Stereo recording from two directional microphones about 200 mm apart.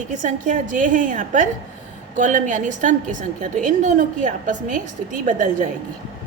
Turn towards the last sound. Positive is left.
turn(degrees=-40)  # may be behind; listen again after turning